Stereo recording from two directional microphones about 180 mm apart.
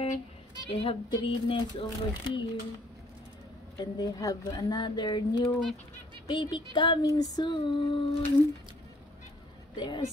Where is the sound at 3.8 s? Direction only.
20° left (ahead or behind).